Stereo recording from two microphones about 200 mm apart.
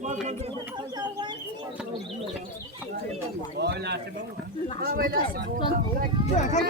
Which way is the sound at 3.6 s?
55° right (ahead or behind).